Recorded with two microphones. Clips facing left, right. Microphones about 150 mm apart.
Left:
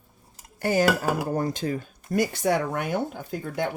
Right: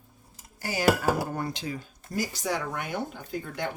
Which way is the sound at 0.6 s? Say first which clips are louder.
Left 9 dB; 55° left (ahead or behind).